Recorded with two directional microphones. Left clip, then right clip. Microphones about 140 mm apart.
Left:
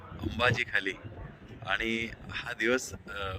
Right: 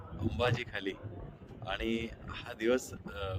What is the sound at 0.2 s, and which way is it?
Speech, 10° right (ahead or behind).